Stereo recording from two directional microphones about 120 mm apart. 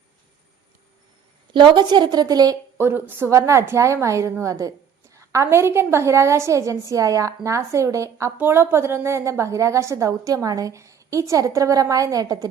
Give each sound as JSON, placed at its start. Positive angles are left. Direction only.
{"t": 1.5, "sound": "a woman's voice", "side_deg": -40}